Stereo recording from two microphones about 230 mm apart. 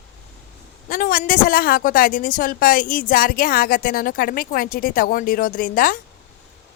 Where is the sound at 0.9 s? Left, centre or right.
Left.